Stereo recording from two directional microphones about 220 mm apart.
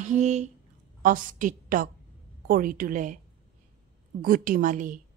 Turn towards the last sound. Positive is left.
turn(degrees=-35)  # may be behind; listen again after turning